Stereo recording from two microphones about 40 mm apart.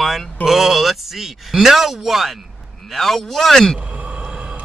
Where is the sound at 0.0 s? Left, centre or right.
Centre.